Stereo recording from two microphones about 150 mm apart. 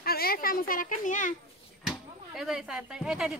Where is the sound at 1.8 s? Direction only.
5° right (ahead or behind).